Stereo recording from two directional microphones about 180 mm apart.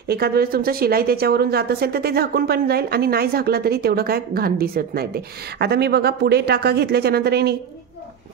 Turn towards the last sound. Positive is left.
turn(degrees=-60)  # may be behind; listen again after turning